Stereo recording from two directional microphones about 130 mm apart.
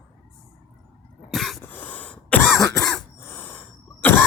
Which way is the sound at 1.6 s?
15° left (ahead or behind).